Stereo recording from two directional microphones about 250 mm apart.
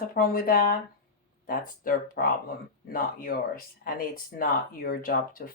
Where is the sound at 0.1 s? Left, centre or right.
Left.